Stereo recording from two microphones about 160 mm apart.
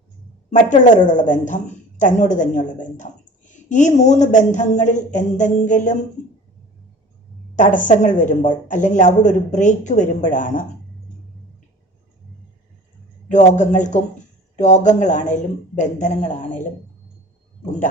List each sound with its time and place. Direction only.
0.7 s speech: 50° left (ahead or behind)
7.5 s speech: 55° left (ahead or behind)
13.2 s speech: 50° left (ahead or behind)